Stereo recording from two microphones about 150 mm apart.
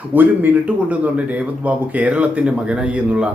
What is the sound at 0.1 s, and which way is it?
A man's voice, 10° right (ahead or behind).